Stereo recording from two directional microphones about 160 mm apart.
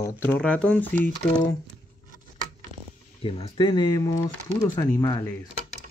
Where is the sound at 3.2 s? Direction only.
35° left (ahead or behind).